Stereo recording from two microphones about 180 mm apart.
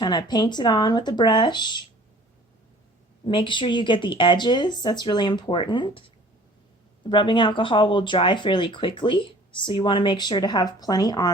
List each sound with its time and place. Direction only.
0.0 s speech: 25° left (ahead or behind)
3.2 s speech: 25° left (ahead or behind)
7.0 s speech: 25° left (ahead or behind)